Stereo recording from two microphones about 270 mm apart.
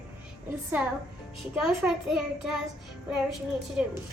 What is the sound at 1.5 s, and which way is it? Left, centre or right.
A child's voice, centre.